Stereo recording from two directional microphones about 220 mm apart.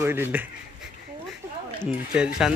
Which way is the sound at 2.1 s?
5° right (ahead or behind).